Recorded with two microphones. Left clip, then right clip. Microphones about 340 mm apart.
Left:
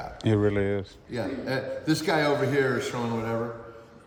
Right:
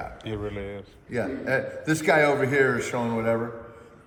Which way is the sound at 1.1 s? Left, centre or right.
Centre.